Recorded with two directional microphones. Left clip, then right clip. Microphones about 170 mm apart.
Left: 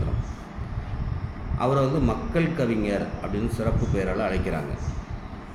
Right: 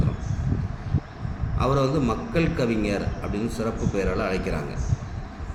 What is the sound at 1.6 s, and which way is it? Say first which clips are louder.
A man's voice: even; 5° right (ahead or behind).